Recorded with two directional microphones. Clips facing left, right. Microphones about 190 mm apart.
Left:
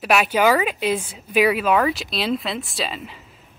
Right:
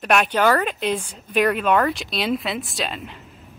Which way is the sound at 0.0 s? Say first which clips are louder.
Left 1 dB; 5° left (ahead or behind).